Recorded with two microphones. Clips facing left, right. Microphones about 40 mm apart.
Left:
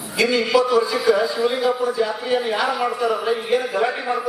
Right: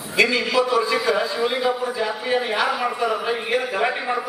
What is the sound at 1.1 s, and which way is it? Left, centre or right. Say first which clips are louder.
A man's voice: left 3 dB; right.